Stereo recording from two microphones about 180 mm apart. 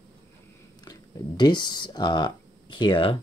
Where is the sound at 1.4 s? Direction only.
25° left (ahead or behind).